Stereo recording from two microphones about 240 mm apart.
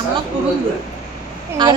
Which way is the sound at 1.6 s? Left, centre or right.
Centre.